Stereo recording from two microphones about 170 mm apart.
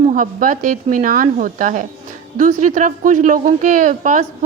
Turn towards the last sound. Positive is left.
turn(degrees=-50)  # may be behind; listen again after turning